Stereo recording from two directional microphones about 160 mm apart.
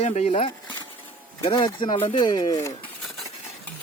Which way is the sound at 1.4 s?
30° left (ahead or behind).